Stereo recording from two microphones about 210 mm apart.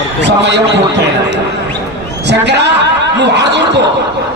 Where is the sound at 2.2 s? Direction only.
55° right (ahead or behind).